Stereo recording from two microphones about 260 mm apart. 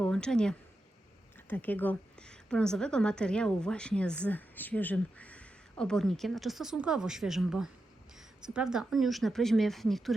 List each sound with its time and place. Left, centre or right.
0.0 s a woman's voice: centre